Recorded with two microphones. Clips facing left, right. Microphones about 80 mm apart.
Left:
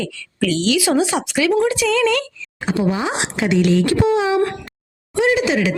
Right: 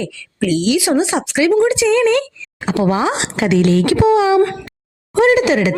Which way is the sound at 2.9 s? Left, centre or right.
Right.